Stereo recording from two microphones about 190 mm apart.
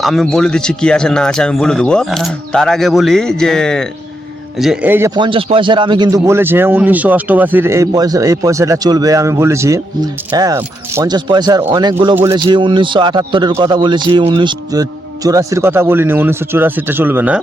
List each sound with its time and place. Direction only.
0.0 s speech: centre (ahead or behind)
5.1 s a man's voice: 25° right (ahead or behind); by 17.4 s 10° right (ahead or behind)